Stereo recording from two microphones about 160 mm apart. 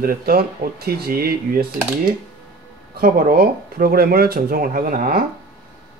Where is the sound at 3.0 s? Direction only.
70° right (ahead or behind).